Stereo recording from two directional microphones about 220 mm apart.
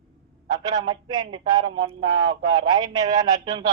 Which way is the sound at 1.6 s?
80° right.